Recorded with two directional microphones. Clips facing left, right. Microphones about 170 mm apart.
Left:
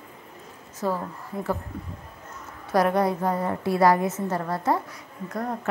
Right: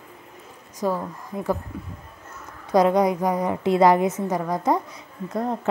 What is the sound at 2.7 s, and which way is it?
A woman's voice, 20° right (ahead or behind).